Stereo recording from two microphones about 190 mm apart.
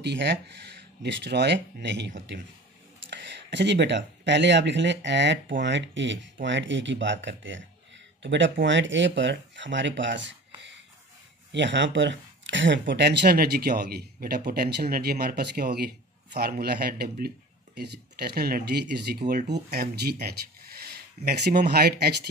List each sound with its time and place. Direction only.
0.0 s speech: 65° right (ahead or behind)